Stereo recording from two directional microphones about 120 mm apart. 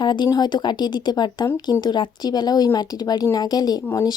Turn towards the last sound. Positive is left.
turn(degrees=35)  # may be behind; listen again after turning